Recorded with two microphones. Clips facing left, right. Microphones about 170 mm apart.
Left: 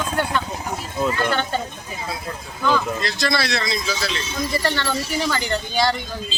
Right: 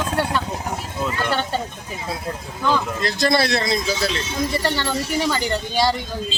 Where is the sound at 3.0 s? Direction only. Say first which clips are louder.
Right 4 dB; 50° right (ahead or behind).